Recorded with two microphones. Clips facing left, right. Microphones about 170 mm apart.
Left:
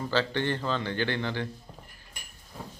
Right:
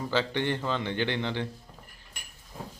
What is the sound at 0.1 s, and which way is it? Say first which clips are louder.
A man's voice: even; 15° right (ahead or behind).